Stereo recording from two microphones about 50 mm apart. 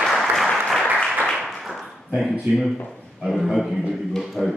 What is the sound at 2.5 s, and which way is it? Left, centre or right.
Speech, right.